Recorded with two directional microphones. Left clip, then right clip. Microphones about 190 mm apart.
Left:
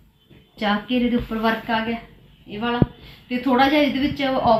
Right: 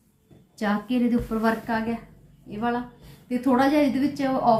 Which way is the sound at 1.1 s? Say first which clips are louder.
Left 2 dB; 5° right (ahead or behind).